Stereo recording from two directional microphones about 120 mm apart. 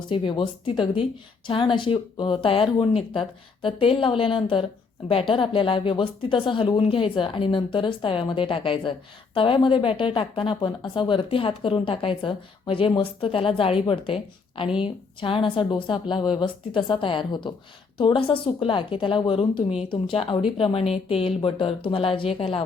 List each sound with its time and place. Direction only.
0.1 s speech: 45° left (ahead or behind)